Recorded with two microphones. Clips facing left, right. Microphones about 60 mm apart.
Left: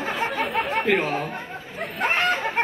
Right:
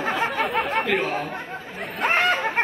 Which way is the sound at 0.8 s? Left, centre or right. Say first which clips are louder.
Left 2 dB; left.